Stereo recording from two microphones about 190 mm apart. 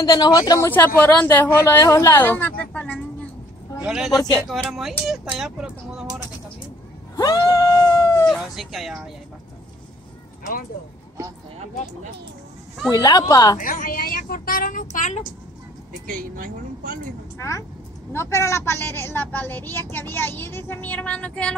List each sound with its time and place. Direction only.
0.0 s a woman's voice: 20° left (ahead or behind); by 6.0 s 5° right (ahead or behind)
7.2 s a sound: 20° left (ahead or behind)
8.3 s speech: centre (ahead or behind)
12.9 s speech: 20° left (ahead or behind)
13.6 s a woman's voice: 45° left (ahead or behind)
16.1 s speech: 45° right (ahead or behind)
17.4 s a woman's voice: 15° left (ahead or behind)